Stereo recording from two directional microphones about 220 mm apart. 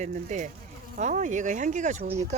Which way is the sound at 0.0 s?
35° right (ahead or behind).